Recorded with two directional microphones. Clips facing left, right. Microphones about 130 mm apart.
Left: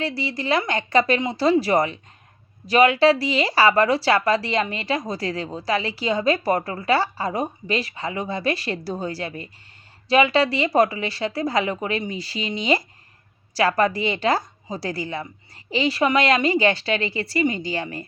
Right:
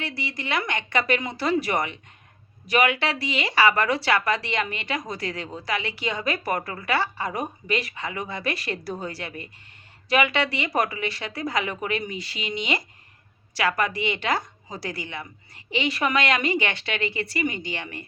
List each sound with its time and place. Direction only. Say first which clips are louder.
0.0 s speech: left 6 dB; 35° left (ahead or behind)